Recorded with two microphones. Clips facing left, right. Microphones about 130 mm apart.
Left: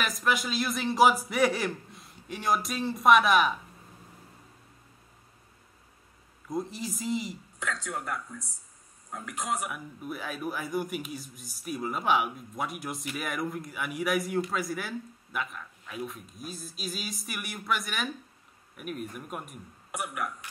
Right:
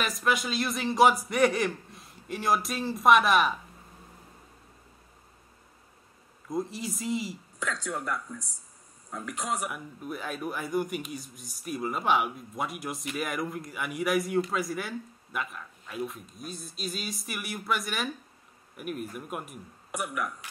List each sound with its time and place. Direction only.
0.0 s speech: centre (ahead or behind)
6.5 s speech: centre (ahead or behind)
7.6 s speech: 35° right (ahead or behind)
9.7 s speech: centre (ahead or behind)